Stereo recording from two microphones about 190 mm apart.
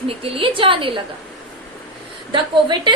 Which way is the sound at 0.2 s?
30° right (ahead or behind).